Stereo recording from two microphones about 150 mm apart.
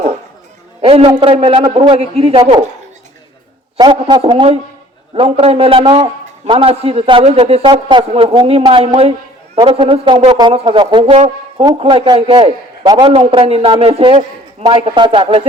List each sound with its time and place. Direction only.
0.8 s a man's voice: 40° right (ahead or behind)
2.4 s a woman's voice: 30° right (ahead or behind)
3.8 s a man's voice: 30° right (ahead or behind)